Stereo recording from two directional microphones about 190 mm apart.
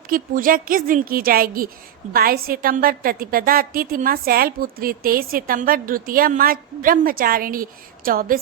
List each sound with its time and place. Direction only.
0.1 s a woman's voice: 45° right (ahead or behind)